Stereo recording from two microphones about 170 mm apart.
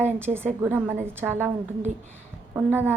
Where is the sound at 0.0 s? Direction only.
15° right (ahead or behind).